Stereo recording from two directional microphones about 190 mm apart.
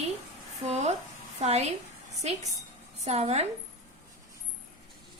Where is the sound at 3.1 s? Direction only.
35° right (ahead or behind).